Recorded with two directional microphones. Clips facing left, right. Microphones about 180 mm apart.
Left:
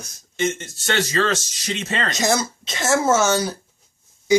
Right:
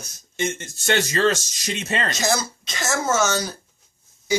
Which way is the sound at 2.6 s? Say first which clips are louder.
Left 8 dB; 30° left (ahead or behind).